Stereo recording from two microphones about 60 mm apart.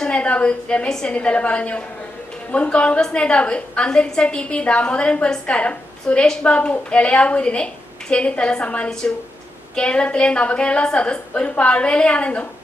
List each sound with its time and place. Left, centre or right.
0.0 s a woman's voice: centre